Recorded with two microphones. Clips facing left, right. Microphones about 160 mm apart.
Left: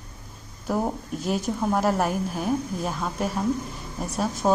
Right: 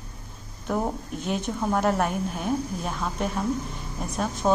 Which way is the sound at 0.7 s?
5° left (ahead or behind).